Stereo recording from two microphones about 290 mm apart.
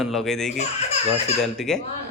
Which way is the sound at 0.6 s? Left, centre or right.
Left.